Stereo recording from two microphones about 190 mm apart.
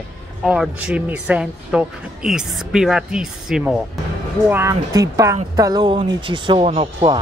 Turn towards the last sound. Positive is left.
turn(degrees=-30)  # may be behind; listen again after turning